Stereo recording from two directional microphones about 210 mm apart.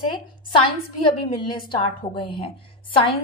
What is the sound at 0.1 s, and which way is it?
A woman's voice, 25° left (ahead or behind).